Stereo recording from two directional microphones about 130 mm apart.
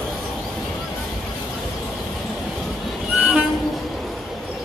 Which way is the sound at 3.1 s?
10° right (ahead or behind).